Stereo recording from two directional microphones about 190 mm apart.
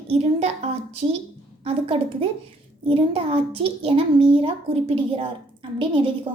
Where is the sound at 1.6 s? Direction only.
30° right (ahead or behind).